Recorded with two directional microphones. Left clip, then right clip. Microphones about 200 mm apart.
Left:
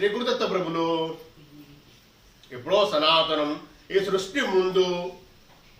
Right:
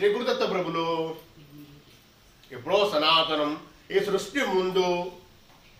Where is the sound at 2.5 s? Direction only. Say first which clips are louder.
Left 2 dB; 15° left (ahead or behind).